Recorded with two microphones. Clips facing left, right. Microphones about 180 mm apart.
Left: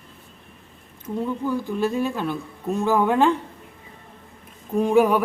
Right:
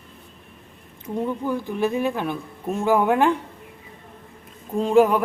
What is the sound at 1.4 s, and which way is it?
Speech, 15° right (ahead or behind).